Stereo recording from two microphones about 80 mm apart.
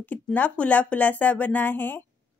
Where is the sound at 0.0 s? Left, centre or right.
Left.